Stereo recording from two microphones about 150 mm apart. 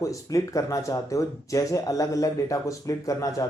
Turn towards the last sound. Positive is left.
turn(degrees=20)  # may be behind; listen again after turning